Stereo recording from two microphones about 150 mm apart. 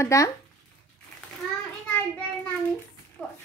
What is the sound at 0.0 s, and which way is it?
Speech, 20° left (ahead or behind).